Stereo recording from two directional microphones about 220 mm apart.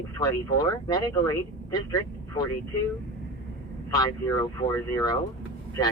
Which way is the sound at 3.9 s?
15° left (ahead or behind).